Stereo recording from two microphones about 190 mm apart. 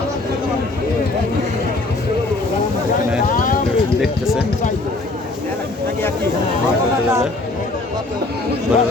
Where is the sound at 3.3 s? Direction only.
45° left (ahead or behind).